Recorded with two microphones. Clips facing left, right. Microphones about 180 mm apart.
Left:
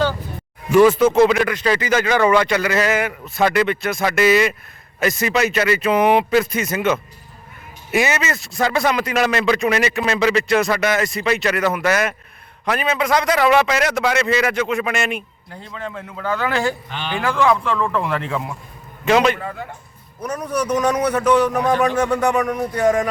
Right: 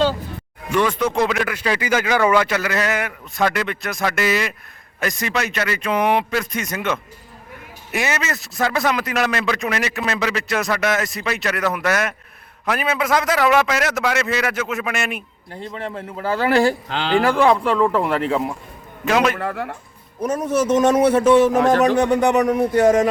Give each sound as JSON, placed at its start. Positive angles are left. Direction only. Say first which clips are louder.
{"t": 0.7, "sound": "a man's voice", "louder": "left 7 dB", "side_deg": 5}
{"t": 15.7, "sound": "speech", "louder": "even", "side_deg": -30}
{"t": 16.9, "sound": "speech", "louder": "right 6 dB", "side_deg": -90}
{"t": 17.2, "sound": "speech", "louder": "right 2 dB", "side_deg": -35}
{"t": 19.0, "sound": "a man's voice", "louder": "left 2 dB", "side_deg": 0}
{"t": 19.4, "sound": "speech", "louder": "right 4 dB", "side_deg": -70}
{"t": 20.2, "sound": "a man's voice", "louder": "right 4 dB", "side_deg": -25}